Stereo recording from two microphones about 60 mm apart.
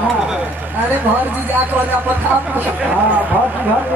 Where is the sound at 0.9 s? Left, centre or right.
Right.